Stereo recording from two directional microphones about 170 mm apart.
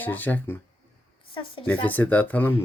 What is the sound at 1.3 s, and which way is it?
Speech, 30° left (ahead or behind).